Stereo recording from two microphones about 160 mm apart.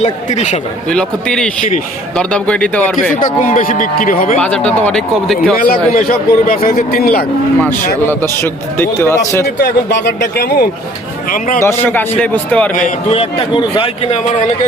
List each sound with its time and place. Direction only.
0.3 s a man's voice: 45° left (ahead or behind)
0.9 s a man's voice: 5° left (ahead or behind)
3.2 s a man's voice: 55° left (ahead or behind)
4.4 s speech: 5° left (ahead or behind)
5.5 s a man's voice: 65° left (ahead or behind)
7.6 s speech: 15° left (ahead or behind)
9.6 s speech: 90° left
11.3 s a man's voice: 60° left (ahead or behind)
11.6 s speech: 15° left (ahead or behind)
13.1 s speech: 35° left (ahead or behind)